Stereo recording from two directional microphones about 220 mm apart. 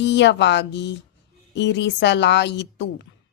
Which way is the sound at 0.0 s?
55° left (ahead or behind).